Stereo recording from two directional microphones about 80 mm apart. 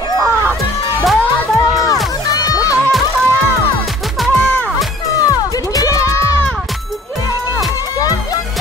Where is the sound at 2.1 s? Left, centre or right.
Left.